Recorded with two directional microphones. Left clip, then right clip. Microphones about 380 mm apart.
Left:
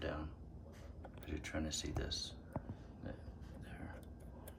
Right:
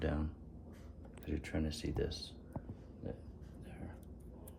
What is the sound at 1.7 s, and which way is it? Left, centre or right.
Speech, centre.